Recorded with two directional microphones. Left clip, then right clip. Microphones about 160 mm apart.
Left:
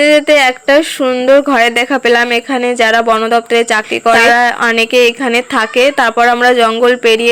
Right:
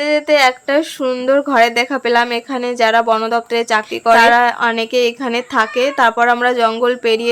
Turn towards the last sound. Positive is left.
turn(degrees=20)  # may be behind; listen again after turning